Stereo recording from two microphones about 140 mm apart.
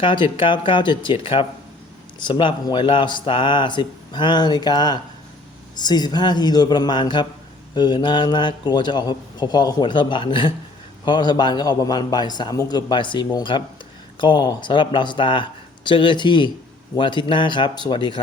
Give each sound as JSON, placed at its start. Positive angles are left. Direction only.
{"t": 0.0, "sound": "speech", "side_deg": 35}